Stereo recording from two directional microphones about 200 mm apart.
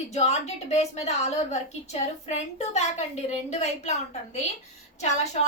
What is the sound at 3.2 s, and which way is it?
A woman's voice, 35° left (ahead or behind).